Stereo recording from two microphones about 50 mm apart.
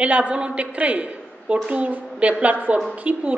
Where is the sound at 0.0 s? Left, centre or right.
Right.